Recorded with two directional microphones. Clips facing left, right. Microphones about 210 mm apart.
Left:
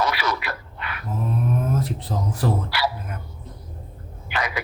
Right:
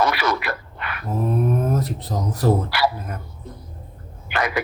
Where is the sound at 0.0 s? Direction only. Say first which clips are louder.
Right 3 dB; 55° right (ahead or behind).